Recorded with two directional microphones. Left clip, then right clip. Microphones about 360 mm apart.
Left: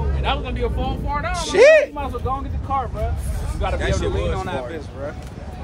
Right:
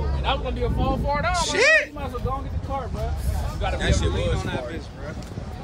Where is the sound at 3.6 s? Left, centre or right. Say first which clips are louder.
Left 3 dB; left.